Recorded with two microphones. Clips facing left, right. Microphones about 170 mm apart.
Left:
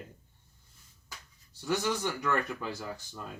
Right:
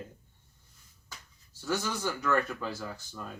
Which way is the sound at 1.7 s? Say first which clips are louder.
Left 1 dB; 15° left (ahead or behind).